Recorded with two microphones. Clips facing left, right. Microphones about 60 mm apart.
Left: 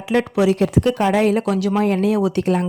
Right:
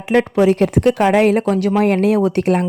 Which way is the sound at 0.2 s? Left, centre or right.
Right.